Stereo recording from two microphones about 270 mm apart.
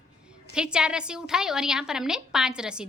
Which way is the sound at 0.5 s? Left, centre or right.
Centre.